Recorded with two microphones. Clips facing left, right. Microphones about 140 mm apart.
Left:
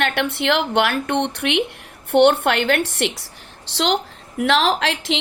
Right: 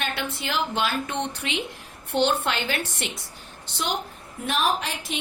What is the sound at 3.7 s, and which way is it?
A woman's voice, 80° left.